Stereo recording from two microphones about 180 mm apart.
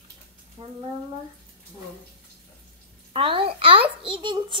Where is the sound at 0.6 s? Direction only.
25° right (ahead or behind).